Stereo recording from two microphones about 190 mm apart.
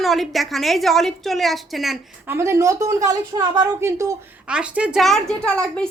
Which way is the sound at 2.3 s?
15° right (ahead or behind).